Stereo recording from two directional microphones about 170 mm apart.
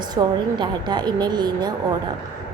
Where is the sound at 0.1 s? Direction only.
25° right (ahead or behind).